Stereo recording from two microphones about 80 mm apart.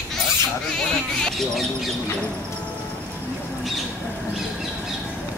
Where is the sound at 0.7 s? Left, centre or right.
Centre.